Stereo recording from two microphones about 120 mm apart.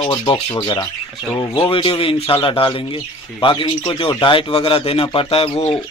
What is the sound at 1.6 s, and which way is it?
Speech, 50° left (ahead or behind).